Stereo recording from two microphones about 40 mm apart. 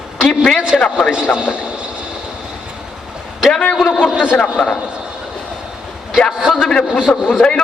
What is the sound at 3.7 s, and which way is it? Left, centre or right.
Speech, centre.